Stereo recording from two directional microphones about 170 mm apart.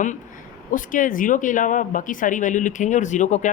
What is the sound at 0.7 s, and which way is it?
Speech, 50° left (ahead or behind).